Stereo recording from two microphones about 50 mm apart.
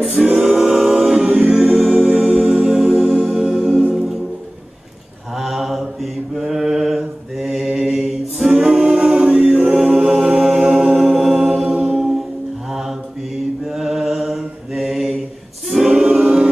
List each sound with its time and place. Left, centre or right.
0.2 s a capella: centre
1.2 s a capella: right
2.0 s music: right
5.3 s mantra: centre
8.5 s a capella: centre
10.4 s music: centre
10.9 s choir: centre
11.7 s a capella: centre
13.7 s mantra: centre
15.7 s choir: centre
16.2 s music: centre